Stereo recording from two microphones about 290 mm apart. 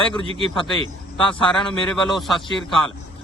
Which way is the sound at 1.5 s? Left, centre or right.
Centre.